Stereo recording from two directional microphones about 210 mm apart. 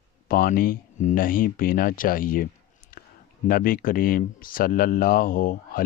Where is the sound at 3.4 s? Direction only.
40° left (ahead or behind).